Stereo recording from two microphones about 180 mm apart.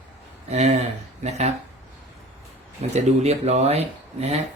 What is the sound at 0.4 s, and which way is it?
Speech, 35° right (ahead or behind).